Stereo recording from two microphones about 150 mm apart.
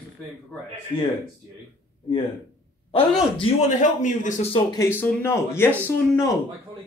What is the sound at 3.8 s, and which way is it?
Speech, 55° left (ahead or behind).